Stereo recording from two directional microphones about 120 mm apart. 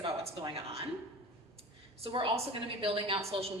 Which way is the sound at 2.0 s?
45° right (ahead or behind).